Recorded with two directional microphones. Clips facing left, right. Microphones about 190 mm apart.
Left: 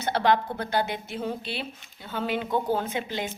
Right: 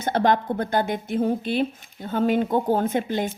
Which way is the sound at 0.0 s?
50° right (ahead or behind).